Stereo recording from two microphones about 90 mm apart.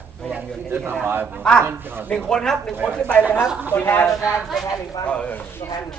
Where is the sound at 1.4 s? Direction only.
10° left (ahead or behind).